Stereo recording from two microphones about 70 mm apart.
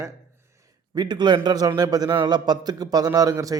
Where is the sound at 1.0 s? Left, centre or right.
Right.